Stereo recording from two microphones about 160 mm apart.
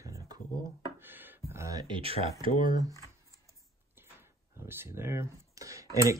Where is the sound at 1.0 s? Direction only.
10° right (ahead or behind).